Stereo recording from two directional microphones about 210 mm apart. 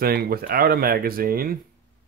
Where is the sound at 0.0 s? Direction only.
45° right (ahead or behind).